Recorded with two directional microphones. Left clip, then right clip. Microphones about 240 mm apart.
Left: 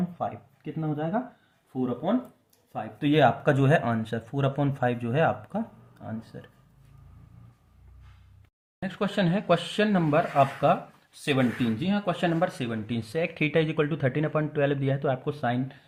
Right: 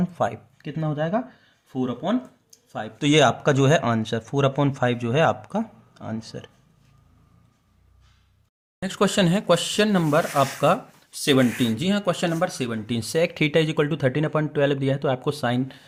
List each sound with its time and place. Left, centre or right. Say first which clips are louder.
0.2 s speech: right 10 dB; right
1.7 s speech: right 2 dB; right
8.8 s speech: right 7 dB; right